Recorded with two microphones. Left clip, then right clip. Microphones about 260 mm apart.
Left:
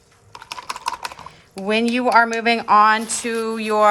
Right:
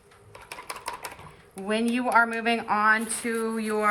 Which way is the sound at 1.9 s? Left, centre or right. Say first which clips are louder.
Left 6 dB; left.